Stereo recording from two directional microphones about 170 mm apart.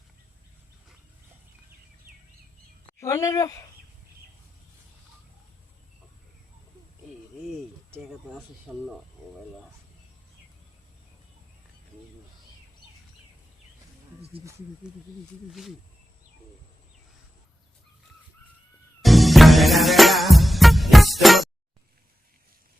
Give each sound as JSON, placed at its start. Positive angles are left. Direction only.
{"t": 3.0, "sound": "speech", "side_deg": 15}
{"t": 7.9, "sound": "speech", "side_deg": -15}
{"t": 8.4, "sound": "speech", "side_deg": 0}
{"t": 19.0, "sound": "music", "side_deg": 0}